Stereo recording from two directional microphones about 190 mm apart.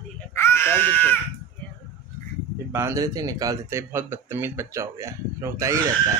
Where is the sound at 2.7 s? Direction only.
15° right (ahead or behind).